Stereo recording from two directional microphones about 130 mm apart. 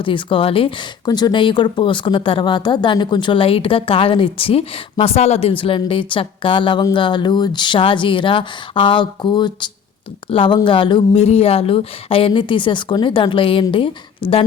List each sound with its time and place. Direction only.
0.0 s speech: 40° left (ahead or behind)
1.0 s speech: 30° left (ahead or behind)
11.2 s speech: 50° left (ahead or behind)